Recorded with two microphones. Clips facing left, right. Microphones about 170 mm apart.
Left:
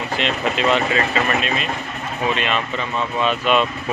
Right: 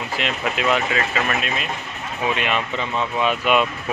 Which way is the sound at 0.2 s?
5° right (ahead or behind).